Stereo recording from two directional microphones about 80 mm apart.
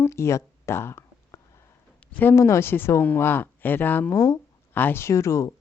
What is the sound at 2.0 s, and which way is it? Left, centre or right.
Speech, left.